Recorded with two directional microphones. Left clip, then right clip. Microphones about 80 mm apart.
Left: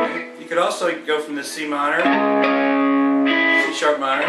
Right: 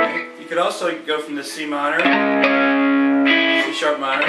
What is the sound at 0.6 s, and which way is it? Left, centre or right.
Speech, centre.